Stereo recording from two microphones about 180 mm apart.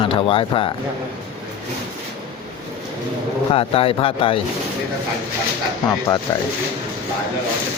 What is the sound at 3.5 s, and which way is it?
Speech, 30° left (ahead or behind).